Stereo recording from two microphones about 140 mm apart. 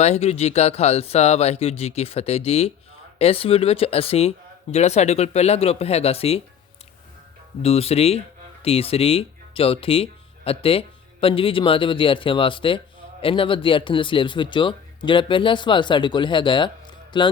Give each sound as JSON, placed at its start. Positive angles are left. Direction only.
{"t": 0.0, "sound": "speech", "side_deg": 50}
{"t": 7.6, "sound": "speech", "side_deg": 45}